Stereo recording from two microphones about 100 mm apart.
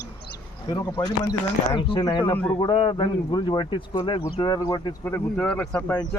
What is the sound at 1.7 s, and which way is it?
Speech, 60° left (ahead or behind).